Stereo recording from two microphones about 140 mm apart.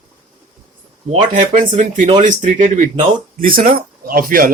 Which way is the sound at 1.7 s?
60° right (ahead or behind).